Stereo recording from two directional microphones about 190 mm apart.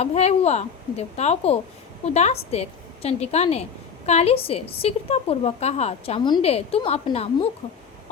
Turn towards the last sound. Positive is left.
turn(degrees=35)  # may be behind; listen again after turning